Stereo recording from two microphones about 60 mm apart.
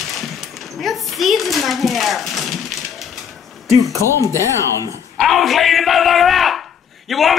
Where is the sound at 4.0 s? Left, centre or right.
Left.